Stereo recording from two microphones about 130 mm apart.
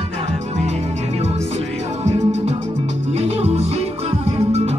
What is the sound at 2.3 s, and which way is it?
Music, 55° right (ahead or behind).